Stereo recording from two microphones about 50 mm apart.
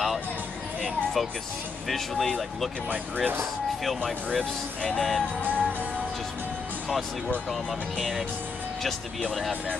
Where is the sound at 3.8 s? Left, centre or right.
Centre.